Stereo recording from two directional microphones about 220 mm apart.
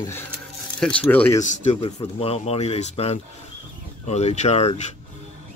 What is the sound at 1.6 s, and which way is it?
Speech, 25° left (ahead or behind).